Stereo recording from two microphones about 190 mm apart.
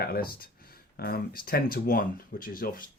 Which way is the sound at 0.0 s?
50° left (ahead or behind).